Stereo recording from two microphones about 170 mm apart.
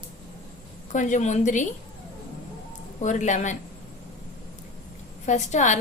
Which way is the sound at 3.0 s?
45° left (ahead or behind).